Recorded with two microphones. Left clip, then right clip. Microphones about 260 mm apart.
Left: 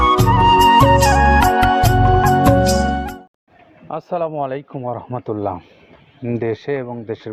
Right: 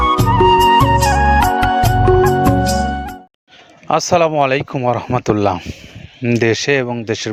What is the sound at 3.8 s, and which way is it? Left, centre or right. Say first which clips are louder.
Speech: right 9 dB; right.